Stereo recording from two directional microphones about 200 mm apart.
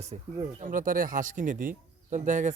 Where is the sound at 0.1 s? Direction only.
30° right (ahead or behind).